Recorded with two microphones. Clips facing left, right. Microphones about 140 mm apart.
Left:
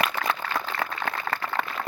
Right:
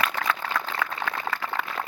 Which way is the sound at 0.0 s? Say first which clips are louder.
Even; 25° left (ahead or behind).